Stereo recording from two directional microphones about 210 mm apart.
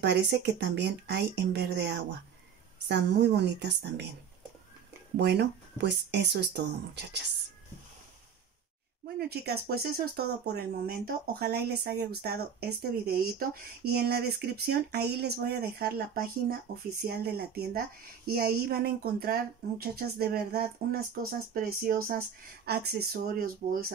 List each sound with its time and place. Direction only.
0.0 s a woman's voice: 55° right (ahead or behind)
5.1 s a woman's voice: 55° right (ahead or behind)
9.0 s a woman's voice: 50° right (ahead or behind)